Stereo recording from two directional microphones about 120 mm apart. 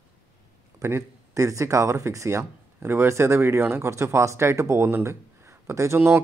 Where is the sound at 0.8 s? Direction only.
25° right (ahead or behind).